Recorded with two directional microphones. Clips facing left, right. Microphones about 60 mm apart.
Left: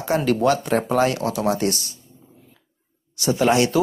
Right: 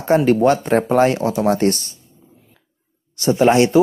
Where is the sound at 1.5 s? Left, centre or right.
Right.